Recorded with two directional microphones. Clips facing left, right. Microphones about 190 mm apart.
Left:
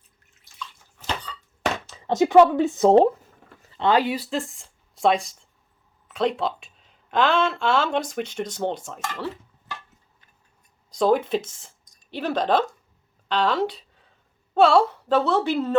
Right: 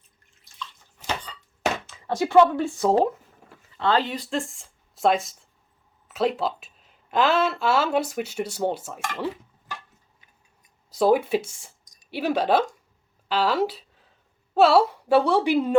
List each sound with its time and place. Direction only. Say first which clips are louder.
2.0 s speech: left 3 dB; 20° left (ahead or behind); by 9.0 s 5° right (ahead or behind)
9.1 s a sound: right 2 dB; 15° right (ahead or behind)
10.9 s a woman's voice: right 1 dB; 5° right (ahead or behind)